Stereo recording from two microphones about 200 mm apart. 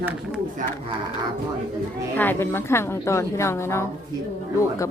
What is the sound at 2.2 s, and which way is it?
A woman's voice, 10° left (ahead or behind).